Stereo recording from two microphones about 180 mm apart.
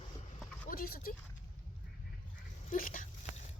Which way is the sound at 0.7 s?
55° left (ahead or behind).